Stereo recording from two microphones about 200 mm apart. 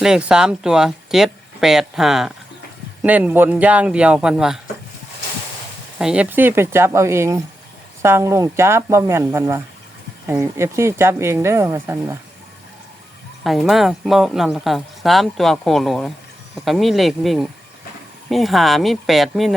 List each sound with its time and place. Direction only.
0.0 s speech: 5° right (ahead or behind)
6.0 s speech: 5° right (ahead or behind)
13.4 s speech: centre (ahead or behind)